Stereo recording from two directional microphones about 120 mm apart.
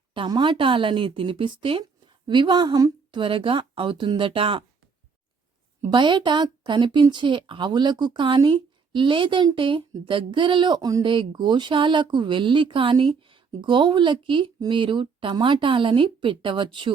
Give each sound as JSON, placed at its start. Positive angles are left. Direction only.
{"t": 0.1, "sound": "a woman's voice", "side_deg": -40}
{"t": 5.8, "sound": "speech", "side_deg": -40}
{"t": 11.0, "sound": "speech", "side_deg": -45}